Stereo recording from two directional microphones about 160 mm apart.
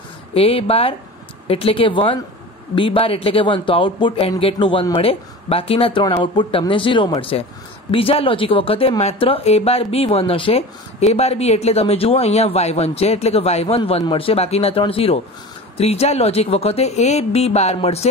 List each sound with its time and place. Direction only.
0.3 s speech: 35° left (ahead or behind)